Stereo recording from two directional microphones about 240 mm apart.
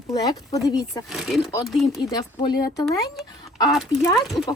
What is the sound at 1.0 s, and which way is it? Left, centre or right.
Speech, centre.